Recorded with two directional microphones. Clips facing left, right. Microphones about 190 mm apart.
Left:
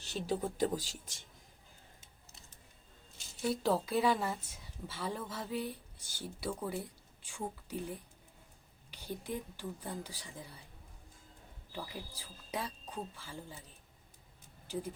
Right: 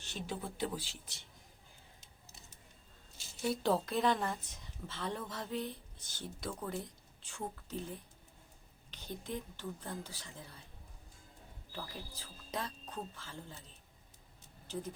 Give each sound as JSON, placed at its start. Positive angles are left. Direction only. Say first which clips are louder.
{"t": 0.0, "sound": "speech", "louder": "left 6 dB", "side_deg": 40}
{"t": 3.4, "sound": "speech", "louder": "left 1 dB", "side_deg": 0}
{"t": 11.7, "sound": "speech", "louder": "left 2 dB", "side_deg": 10}
{"t": 14.7, "sound": "speech", "louder": "left 2 dB", "side_deg": 10}